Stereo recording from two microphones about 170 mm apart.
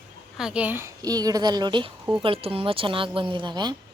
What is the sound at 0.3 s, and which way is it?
A woman's voice, 5° right (ahead or behind).